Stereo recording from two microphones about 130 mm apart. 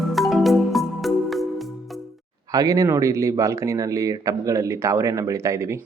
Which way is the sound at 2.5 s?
25° right (ahead or behind).